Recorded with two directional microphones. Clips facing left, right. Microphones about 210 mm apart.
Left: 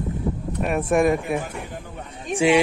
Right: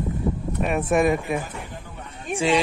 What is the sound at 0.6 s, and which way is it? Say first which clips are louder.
Speech: left 1 dB; centre (ahead or behind).